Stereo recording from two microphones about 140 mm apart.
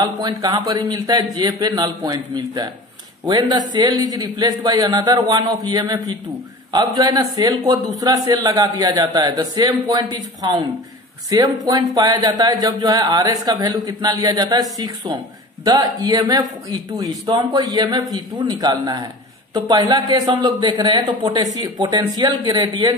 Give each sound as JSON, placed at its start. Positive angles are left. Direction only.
{"t": 0.0, "sound": "a man's voice", "side_deg": -25}